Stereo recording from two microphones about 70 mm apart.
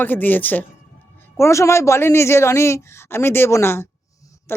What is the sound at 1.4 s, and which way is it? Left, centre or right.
Speech, left.